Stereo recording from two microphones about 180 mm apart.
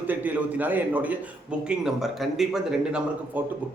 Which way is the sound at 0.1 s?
10° right (ahead or behind).